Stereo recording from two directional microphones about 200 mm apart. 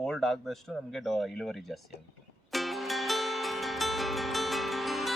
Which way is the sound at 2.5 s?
Centre (ahead or behind).